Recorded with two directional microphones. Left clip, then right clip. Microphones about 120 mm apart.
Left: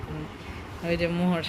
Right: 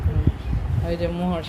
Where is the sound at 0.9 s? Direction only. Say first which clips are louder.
Right 1 dB; 5° left (ahead or behind).